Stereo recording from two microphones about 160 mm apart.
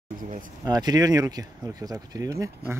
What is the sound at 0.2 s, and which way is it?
Speech, 55° right (ahead or behind).